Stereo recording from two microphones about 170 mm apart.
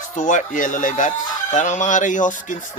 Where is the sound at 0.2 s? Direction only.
50° left (ahead or behind).